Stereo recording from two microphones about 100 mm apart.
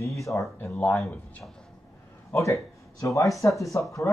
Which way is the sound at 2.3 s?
30° left (ahead or behind).